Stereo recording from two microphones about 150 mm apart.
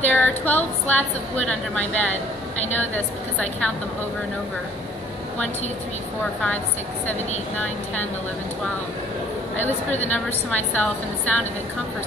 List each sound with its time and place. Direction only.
0.0 s a woman's voice: 10° left (ahead or behind)
7.1 s a woman's voice: 10° left (ahead or behind)
9.7 s speech: 50° left (ahead or behind)
10.1 s a woman's voice: 10° left (ahead or behind)